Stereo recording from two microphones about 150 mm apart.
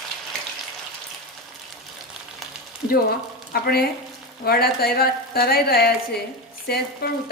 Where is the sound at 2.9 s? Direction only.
90° left.